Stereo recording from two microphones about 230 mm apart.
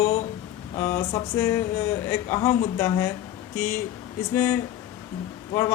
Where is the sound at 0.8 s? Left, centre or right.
Centre.